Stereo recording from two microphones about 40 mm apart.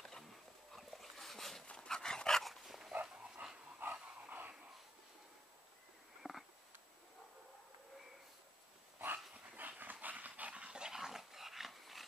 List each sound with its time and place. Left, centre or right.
0.7 s dog: centre
1.9 s dog: centre
2.4 s dog: centre
2.9 s dog: right
3.8 s dog: right
4.3 s a sound: right
6.2 s a sound: centre
9.0 s dog: right
10.5 s dog: right; by 12.1 s centre